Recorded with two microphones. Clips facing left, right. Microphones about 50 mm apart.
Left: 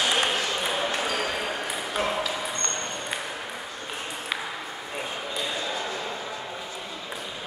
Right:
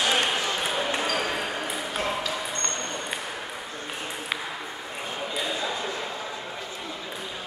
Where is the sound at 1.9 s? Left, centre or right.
Centre.